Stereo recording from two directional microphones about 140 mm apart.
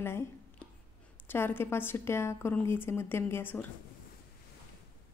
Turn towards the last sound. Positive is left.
turn(degrees=15)  # may be behind; listen again after turning